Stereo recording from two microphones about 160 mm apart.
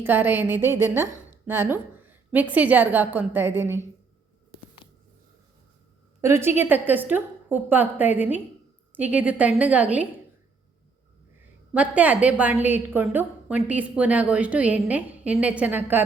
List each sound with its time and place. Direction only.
0.0 s a woman's voice: 10° right (ahead or behind)
4.8 s squish: 30° left (ahead or behind)
6.2 s a woman's voice: 15° right (ahead or behind)
11.7 s a woman's voice: 10° right (ahead or behind)